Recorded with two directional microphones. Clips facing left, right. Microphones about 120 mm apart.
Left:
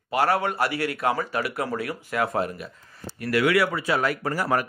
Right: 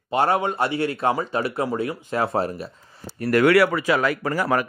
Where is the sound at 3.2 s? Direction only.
45° right (ahead or behind).